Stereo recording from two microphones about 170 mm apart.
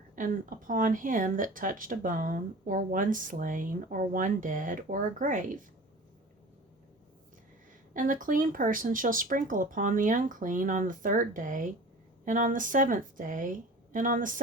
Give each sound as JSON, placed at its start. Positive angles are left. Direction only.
{"t": 0.2, "sound": "speech", "side_deg": -50}
{"t": 7.9, "sound": "speech", "side_deg": -50}